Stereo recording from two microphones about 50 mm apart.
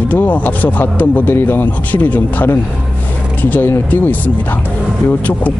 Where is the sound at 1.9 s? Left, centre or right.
Left.